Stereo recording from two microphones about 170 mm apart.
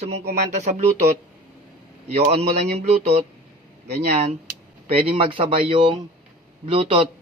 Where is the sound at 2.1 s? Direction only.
40° right (ahead or behind).